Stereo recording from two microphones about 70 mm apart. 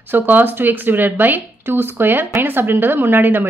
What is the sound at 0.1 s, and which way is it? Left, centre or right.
Speech, right.